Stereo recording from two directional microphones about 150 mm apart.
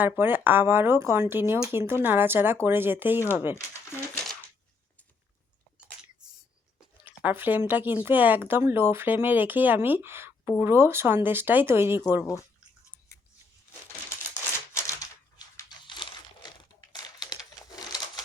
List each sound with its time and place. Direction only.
0.0 s speech: 15° right (ahead or behind)
6.7 s speech: 10° right (ahead or behind)
14.7 s crumpling: 20° left (ahead or behind)
16.9 s typing: 25° left (ahead or behind)